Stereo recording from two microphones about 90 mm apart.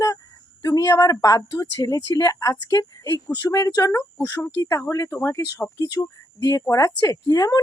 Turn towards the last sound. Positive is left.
turn(degrees=45)  # may be behind; listen again after turning